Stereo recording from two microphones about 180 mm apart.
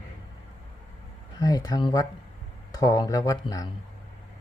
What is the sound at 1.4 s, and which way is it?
Speech, 20° left (ahead or behind).